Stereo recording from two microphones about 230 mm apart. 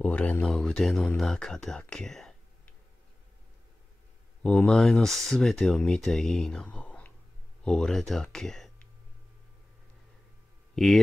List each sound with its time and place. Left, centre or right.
0.0 s speech: centre
4.4 s speech: centre
10.7 s a sound: centre